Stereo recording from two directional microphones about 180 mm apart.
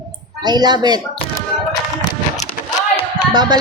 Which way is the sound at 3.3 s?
25° right (ahead or behind).